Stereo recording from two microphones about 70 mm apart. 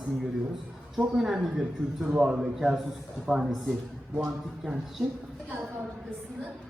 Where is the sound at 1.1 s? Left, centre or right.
Centre.